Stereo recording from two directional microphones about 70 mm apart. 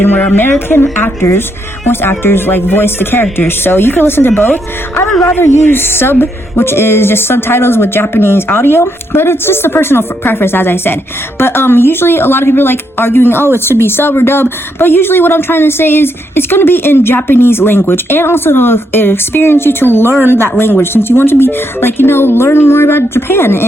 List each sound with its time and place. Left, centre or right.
0.0 s speech: left